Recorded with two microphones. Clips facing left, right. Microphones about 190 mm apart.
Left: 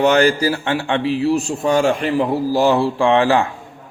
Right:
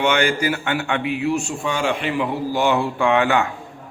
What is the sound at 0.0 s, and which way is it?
A man's voice, 40° left (ahead or behind).